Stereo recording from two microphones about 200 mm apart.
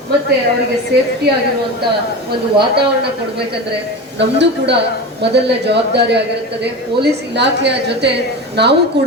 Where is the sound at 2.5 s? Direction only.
55° right (ahead or behind).